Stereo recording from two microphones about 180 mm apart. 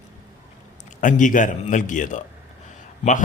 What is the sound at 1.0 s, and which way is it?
Speech, 45° left (ahead or behind).